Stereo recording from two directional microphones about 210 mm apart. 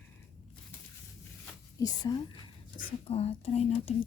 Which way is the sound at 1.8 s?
20° left (ahead or behind).